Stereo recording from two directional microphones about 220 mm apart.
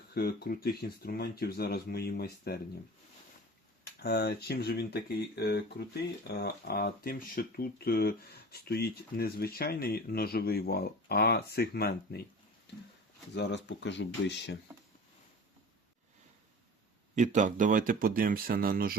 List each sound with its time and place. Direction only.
0.1 s speech: 45° left (ahead or behind)
3.8 s speech: 45° left (ahead or behind)
13.3 s speech: 50° left (ahead or behind)
17.2 s speech: 35° right (ahead or behind)